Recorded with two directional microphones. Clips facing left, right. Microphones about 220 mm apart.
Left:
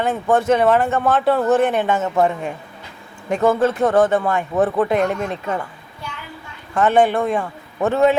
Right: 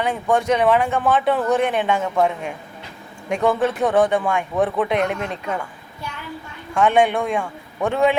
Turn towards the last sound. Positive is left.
turn(degrees=5)  # may be behind; listen again after turning